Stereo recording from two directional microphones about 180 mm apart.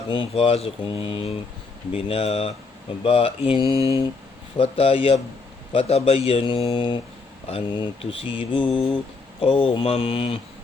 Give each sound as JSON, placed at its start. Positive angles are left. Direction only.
{"t": 0.1, "sound": "speech", "side_deg": 30}
{"t": 3.7, "sound": "mantra", "side_deg": -15}
{"t": 4.5, "sound": "speech", "side_deg": 30}